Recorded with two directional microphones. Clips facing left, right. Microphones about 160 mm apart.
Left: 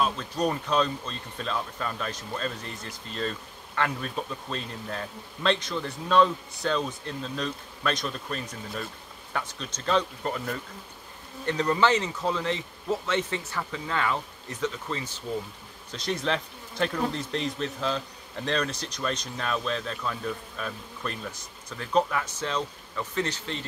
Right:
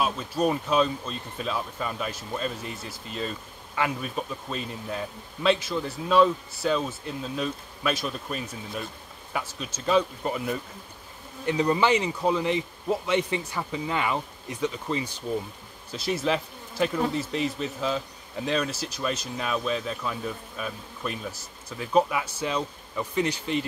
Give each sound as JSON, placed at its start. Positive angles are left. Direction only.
{"t": 0.0, "sound": "speech", "side_deg": -5}